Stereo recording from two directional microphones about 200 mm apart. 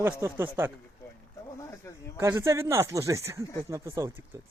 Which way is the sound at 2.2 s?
15° right (ahead or behind).